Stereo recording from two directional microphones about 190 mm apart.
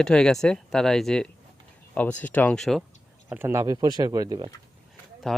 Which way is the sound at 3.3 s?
10° right (ahead or behind).